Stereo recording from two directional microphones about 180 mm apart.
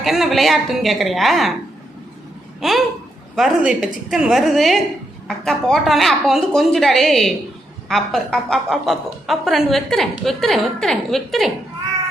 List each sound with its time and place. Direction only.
0.0 s a woman's voice: centre (ahead or behind)
2.6 s a sound: centre (ahead or behind)
3.3 s a woman's voice: 5° right (ahead or behind)